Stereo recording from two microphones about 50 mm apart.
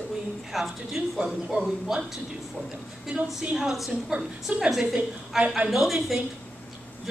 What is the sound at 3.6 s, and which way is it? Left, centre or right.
Speech, centre.